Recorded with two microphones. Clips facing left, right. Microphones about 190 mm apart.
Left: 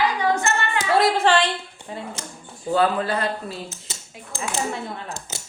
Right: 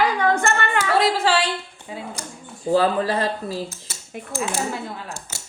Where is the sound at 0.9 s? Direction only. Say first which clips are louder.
Left 2 dB; 5° right (ahead or behind).